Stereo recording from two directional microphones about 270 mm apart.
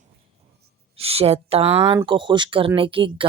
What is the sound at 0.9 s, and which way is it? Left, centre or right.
A woman's voice, right.